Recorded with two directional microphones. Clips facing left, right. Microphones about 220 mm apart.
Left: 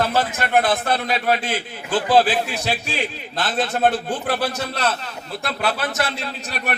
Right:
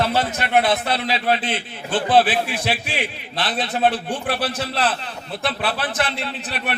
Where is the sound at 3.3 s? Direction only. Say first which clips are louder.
Left 2 dB; 45° left (ahead or behind).